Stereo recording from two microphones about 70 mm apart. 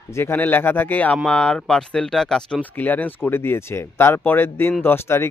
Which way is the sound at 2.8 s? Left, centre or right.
Left.